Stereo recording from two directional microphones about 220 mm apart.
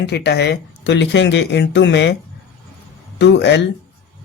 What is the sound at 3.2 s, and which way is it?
Speech, 50° left (ahead or behind).